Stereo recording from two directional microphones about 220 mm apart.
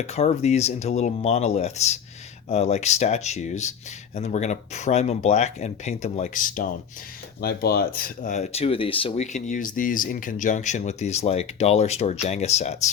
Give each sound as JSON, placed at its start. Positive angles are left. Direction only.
{"t": 0.0, "sound": "speech", "side_deg": 30}